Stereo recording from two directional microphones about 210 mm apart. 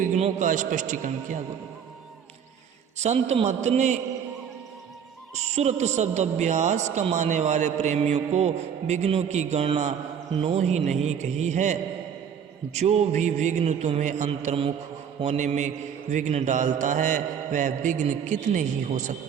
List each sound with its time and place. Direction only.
0.0 s speech: 35° right (ahead or behind)
3.0 s speech: 30° right (ahead or behind)
5.3 s speech: 30° right (ahead or behind)